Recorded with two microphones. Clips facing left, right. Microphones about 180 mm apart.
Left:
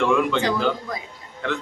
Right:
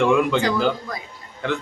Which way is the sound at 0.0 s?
5° right (ahead or behind).